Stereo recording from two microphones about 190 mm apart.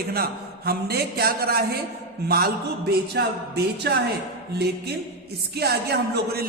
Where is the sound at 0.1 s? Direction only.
55° right (ahead or behind).